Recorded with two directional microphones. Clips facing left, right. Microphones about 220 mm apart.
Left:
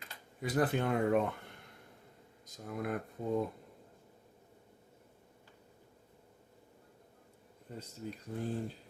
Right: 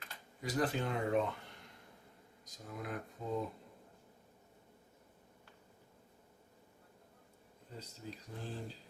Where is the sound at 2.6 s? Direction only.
55° left (ahead or behind).